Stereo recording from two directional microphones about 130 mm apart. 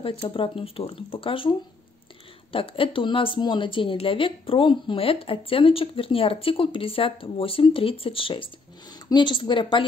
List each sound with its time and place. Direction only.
0.0 s a woman's voice: 45° left (ahead or behind)